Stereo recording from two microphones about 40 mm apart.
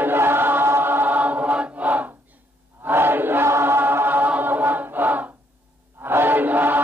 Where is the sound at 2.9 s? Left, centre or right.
Right.